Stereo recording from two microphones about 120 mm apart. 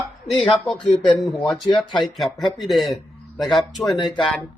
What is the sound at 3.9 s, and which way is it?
Speech, 40° left (ahead or behind).